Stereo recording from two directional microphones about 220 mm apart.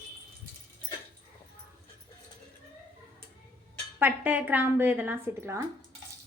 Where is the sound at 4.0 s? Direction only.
5° right (ahead or behind).